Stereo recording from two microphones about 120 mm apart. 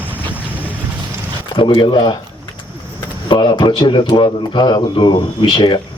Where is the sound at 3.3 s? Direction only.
40° left (ahead or behind).